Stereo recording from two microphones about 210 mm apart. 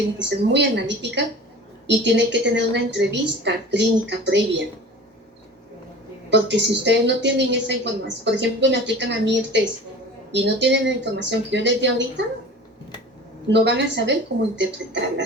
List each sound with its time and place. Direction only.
0.2 s a woman's voice: 55° right (ahead or behind)
6.3 s a woman's voice: 55° right (ahead or behind)
13.5 s a woman's voice: 55° right (ahead or behind)